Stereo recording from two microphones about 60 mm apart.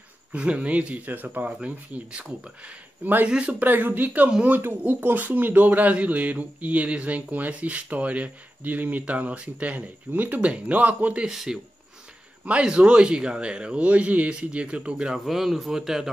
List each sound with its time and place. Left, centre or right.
0.3 s speech: right
11.2 s a man's voice: centre
12.4 s a man's voice: centre
15.1 s a man's voice: centre